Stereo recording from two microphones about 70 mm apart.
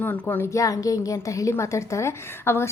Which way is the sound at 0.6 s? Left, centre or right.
Left.